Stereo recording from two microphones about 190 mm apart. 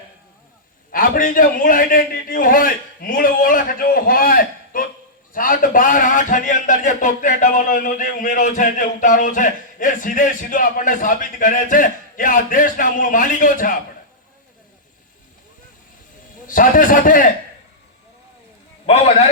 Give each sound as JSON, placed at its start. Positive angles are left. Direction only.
{"t": 0.9, "sound": "a man's voice", "side_deg": 45}
{"t": 16.5, "sound": "a man's voice", "side_deg": 45}
{"t": 18.9, "sound": "a man's voice", "side_deg": 35}